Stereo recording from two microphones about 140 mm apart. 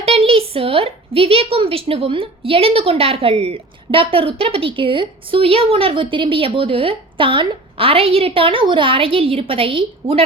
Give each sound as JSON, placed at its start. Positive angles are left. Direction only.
{"t": 0.0, "sound": "a woman's voice", "side_deg": -45}